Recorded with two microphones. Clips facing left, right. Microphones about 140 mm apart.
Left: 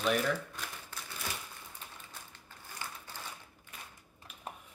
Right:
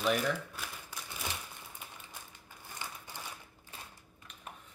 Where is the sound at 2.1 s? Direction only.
15° right (ahead or behind).